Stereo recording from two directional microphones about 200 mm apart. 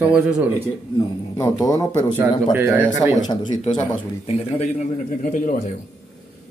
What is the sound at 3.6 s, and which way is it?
A man's voice, 30° left (ahead or behind).